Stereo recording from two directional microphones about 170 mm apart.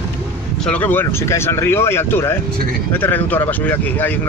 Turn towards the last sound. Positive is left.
turn(degrees=10)  # may be behind; listen again after turning